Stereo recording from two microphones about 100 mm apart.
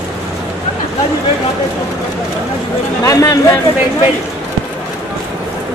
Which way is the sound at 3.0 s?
35° left (ahead or behind).